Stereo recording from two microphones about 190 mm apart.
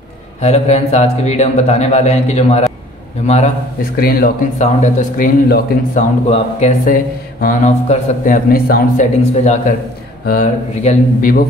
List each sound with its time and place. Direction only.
0.4 s a man's voice: 35° left (ahead or behind)
3.9 s speech: 50° left (ahead or behind)
4.6 s speech: 40° left (ahead or behind)
6.2 s a man's voice: 35° left (ahead or behind)
6.9 s speech: 45° left (ahead or behind)
9.3 s a man's voice: 35° left (ahead or behind)